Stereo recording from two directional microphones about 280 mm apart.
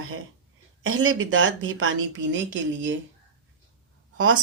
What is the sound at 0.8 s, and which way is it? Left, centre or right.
Speech, right.